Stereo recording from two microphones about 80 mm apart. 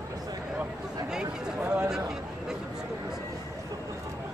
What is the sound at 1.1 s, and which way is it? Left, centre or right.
Speech, centre.